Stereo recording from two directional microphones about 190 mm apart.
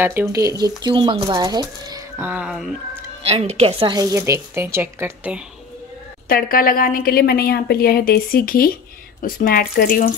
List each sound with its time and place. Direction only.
0.0 s speech: 15° right (ahead or behind)
2.2 s speech: 5° right (ahead or behind)
3.3 s speech: 35° right (ahead or behind)
3.9 s speech: 15° right (ahead or behind)
6.2 s a woman's voice: 50° left (ahead or behind)